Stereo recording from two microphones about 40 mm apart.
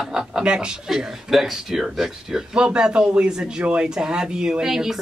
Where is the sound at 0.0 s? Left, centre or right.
Centre.